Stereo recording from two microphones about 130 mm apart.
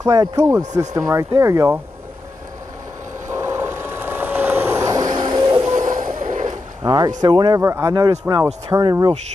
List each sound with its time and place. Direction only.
0.0 s speech: 30° right (ahead or behind)
3.3 s vehicle: 20° right (ahead or behind)
5.6 s a sound: 65° right (ahead or behind); by 6.5 s 85° right
6.8 s speech: 30° right (ahead or behind)
7.6 s speech: 20° right (ahead or behind)
7.9 s speech: 30° right (ahead or behind)